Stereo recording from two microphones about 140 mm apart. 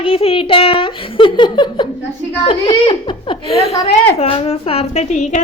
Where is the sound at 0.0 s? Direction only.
40° left (ahead or behind).